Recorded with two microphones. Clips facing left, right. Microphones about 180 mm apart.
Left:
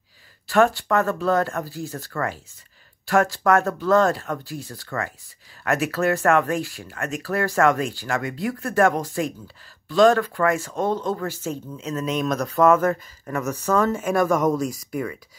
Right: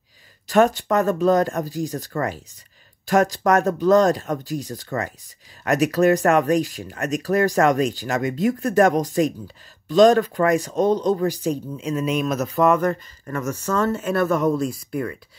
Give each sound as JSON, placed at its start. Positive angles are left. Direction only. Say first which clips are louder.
{"t": 0.5, "sound": "speech", "louder": "right 2 dB", "side_deg": -20}